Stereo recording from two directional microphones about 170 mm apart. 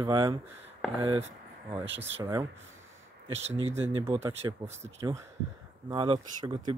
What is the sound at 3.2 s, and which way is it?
Speech, 35° right (ahead or behind).